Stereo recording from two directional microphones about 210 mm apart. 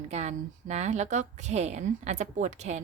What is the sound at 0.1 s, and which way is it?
A woman's voice, 30° right (ahead or behind).